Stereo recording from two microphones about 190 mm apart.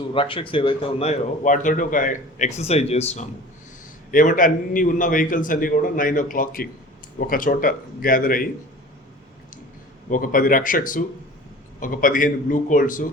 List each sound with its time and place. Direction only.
0.1 s a man's voice: 25° left (ahead or behind)
4.1 s a man's voice: 45° left (ahead or behind)
10.1 s a man's voice: 45° left (ahead or behind)